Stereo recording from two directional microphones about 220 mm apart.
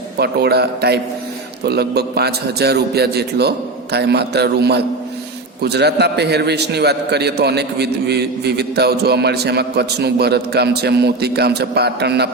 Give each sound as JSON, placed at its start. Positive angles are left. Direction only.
{"t": 0.2, "sound": "a man's voice", "side_deg": -45}